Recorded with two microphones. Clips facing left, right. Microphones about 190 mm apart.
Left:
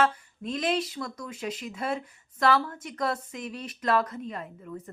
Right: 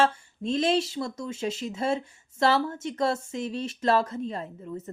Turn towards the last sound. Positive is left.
turn(degrees=-30)  # may be behind; listen again after turning